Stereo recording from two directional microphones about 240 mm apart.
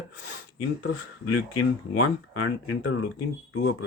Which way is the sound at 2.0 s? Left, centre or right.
Left.